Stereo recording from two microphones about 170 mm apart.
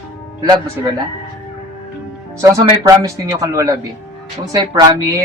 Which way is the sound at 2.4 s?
20° right (ahead or behind).